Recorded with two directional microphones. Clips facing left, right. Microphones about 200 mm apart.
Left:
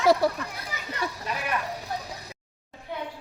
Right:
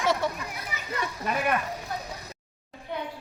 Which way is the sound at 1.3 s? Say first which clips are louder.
Right 4 dB; 55° right (ahead or behind).